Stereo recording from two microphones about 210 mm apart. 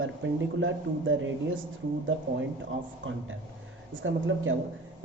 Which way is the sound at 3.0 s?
65° right (ahead or behind).